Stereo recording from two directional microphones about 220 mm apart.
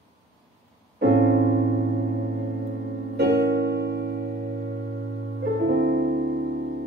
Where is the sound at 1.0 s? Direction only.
50° right (ahead or behind).